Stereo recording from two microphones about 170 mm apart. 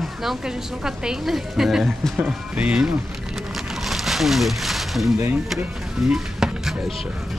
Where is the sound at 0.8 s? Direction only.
Centre (ahead or behind).